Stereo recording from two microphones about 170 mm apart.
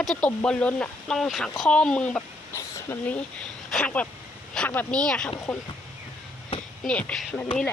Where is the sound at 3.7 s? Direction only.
5° left (ahead or behind).